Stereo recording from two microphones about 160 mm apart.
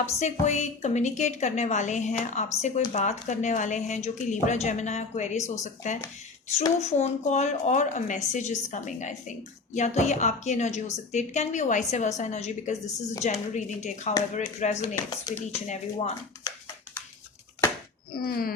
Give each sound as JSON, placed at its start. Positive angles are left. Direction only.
{"t": 0.0, "sound": "speech", "side_deg": 45}
{"t": 15.3, "sound": "speech", "side_deg": 25}
{"t": 15.7, "sound": "speech", "side_deg": 45}
{"t": 18.1, "sound": "speech", "side_deg": 70}